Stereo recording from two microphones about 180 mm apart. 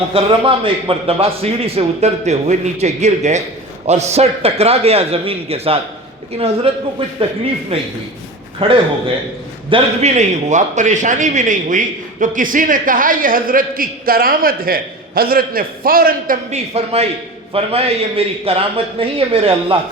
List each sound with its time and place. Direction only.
0.1 s a man's voice: 30° right (ahead or behind)
7.7 s a man's voice: 30° right (ahead or behind)
10.2 s a man's voice: 40° right (ahead or behind)
16.7 s a man's voice: 35° right (ahead or behind)